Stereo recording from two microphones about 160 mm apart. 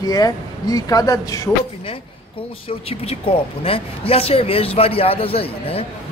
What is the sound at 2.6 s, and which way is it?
Speech, 40° left (ahead or behind).